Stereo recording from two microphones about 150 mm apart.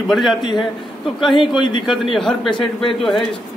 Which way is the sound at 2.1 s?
Centre (ahead or behind).